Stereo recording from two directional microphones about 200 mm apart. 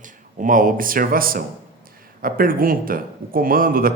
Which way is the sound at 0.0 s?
40° right (ahead or behind).